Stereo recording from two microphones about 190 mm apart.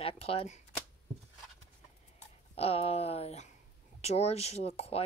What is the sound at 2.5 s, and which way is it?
Speech, 30° left (ahead or behind).